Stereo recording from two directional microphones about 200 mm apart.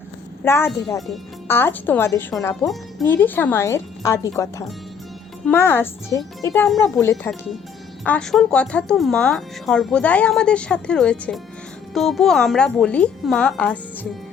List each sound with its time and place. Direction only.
0.4 s speech: 10° left (ahead or behind)